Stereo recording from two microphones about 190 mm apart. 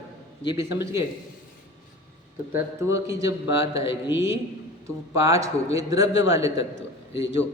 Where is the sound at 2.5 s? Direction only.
15° right (ahead or behind).